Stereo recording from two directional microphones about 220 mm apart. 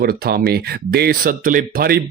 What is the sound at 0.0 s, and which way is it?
Speech, 45° right (ahead or behind).